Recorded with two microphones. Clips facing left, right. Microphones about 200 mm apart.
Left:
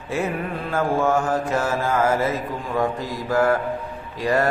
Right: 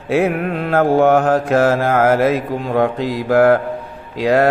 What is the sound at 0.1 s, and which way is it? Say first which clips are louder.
Mantra: right 8 dB; 75° right (ahead or behind).